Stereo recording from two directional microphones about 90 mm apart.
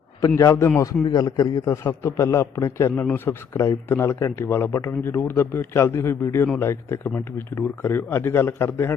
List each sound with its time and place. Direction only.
0.3 s a man's voice: 35° left (ahead or behind)
1.0 s a man's voice: 45° left (ahead or behind); by 2.9 s 30° left (ahead or behind)
2.9 s speech: 20° left (ahead or behind)